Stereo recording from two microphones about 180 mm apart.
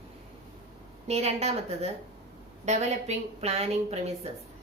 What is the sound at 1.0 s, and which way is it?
A woman's voice, 35° right (ahead or behind).